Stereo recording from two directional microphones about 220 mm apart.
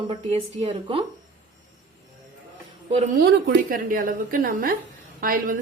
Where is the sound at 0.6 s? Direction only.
25° right (ahead or behind).